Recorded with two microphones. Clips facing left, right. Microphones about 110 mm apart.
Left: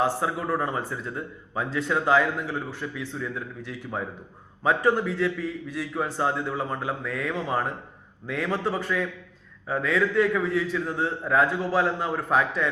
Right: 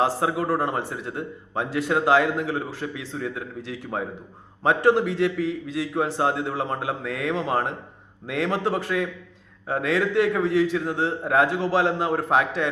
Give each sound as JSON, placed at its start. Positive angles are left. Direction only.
{"t": 0.0, "sound": "a man's voice", "side_deg": -80}
{"t": 2.1, "sound": "speech", "side_deg": -90}
{"t": 6.1, "sound": "speech", "side_deg": -80}
{"t": 8.3, "sound": "a man's voice", "side_deg": -80}
{"t": 11.3, "sound": "a man's voice", "side_deg": -90}